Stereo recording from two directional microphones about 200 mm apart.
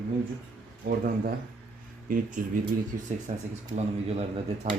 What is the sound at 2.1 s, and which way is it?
Speech, 40° right (ahead or behind).